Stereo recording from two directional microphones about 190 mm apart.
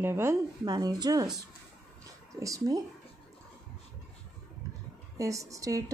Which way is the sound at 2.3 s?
15° right (ahead or behind).